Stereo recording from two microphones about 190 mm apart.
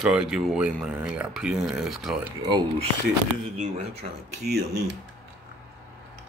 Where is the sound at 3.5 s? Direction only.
35° right (ahead or behind).